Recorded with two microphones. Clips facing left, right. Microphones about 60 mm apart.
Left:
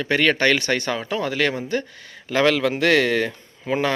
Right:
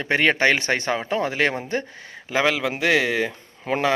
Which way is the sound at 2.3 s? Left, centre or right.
Centre.